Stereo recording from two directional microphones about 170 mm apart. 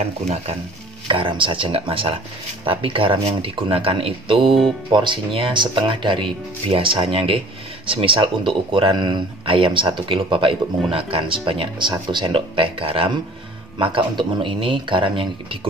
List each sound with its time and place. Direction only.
1.0 s speech: 30° right (ahead or behind)